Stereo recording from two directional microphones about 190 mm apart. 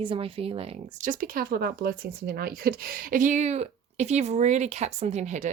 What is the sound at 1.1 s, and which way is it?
Speech, 50° right (ahead or behind).